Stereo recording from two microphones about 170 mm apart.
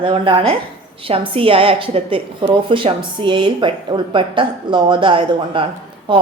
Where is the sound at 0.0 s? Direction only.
30° right (ahead or behind).